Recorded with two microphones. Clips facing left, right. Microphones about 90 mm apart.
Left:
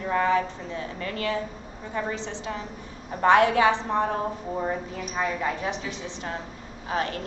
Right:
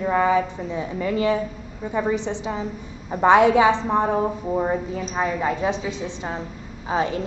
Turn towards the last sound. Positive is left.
turn(degrees=-15)  # may be behind; listen again after turning